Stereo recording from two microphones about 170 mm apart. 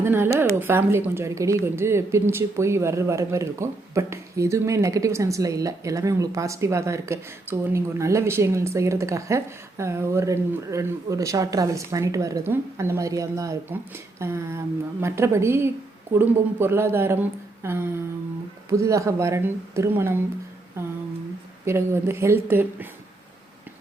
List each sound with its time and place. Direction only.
0.0 s a woman's voice: 15° right (ahead or behind)
21.6 s a woman's voice: 15° right (ahead or behind)